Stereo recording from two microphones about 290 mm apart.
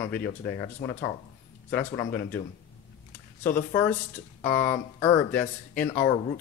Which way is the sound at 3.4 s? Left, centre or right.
Centre.